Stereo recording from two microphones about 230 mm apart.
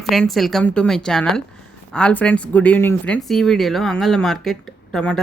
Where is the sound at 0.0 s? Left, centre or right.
Centre.